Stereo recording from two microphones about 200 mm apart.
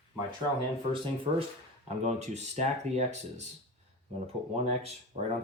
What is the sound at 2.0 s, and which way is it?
Speech, 35° right (ahead or behind).